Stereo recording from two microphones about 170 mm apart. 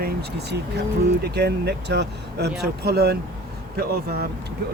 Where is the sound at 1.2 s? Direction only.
75° right (ahead or behind).